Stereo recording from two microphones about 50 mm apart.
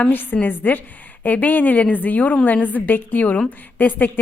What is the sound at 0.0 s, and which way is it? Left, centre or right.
A woman's voice, left.